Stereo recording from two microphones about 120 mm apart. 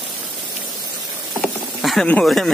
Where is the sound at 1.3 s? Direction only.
5° left (ahead or behind).